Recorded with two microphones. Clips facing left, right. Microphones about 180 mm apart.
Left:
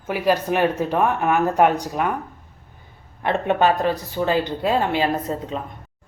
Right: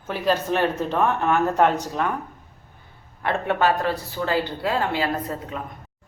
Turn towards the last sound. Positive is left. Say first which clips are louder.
# left 3 dB
turn(degrees=25)  # may be behind; listen again after turning